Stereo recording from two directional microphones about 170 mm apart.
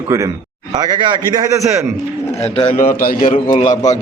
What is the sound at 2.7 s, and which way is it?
Speech, 50° left (ahead or behind).